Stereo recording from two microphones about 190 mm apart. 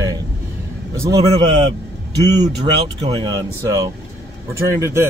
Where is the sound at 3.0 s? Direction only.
20° right (ahead or behind).